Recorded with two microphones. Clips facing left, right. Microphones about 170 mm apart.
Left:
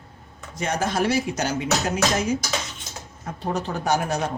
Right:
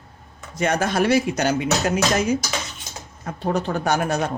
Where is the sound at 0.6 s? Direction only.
65° right (ahead or behind).